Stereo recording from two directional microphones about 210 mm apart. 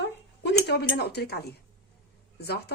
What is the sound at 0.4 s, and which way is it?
Speech, 50° left (ahead or behind).